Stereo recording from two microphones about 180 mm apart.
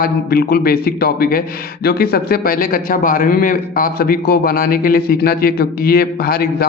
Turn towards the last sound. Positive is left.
turn(degrees=60)  # may be behind; listen again after turning